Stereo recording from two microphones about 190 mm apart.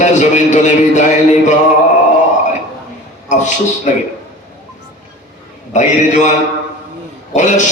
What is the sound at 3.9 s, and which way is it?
Speech, 40° left (ahead or behind).